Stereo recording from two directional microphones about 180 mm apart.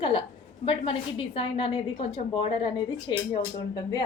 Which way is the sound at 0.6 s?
30° left (ahead or behind).